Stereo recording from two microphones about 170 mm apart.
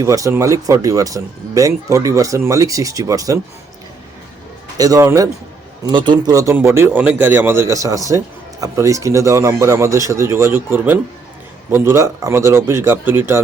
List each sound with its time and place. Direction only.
0.0 s speech: 20° right (ahead or behind)
4.8 s a man's voice: 20° right (ahead or behind)